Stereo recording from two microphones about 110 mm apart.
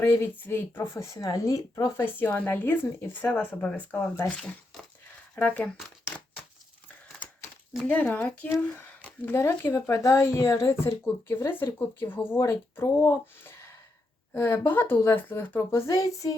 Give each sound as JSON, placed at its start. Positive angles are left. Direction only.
{"t": 0.0, "sound": "speech", "side_deg": 20}
{"t": 2.1, "sound": "speech", "side_deg": 15}
{"t": 7.9, "sound": "speech", "side_deg": 15}
{"t": 9.3, "sound": "speech", "side_deg": 25}